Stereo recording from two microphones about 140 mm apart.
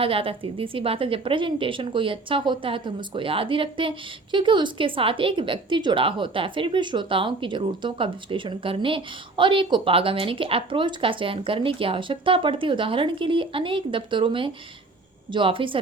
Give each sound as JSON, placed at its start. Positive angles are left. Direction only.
{"t": 0.0, "sound": "a woman's voice", "side_deg": -40}